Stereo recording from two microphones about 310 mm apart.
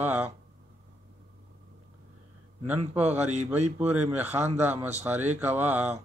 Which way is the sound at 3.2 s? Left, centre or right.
Right.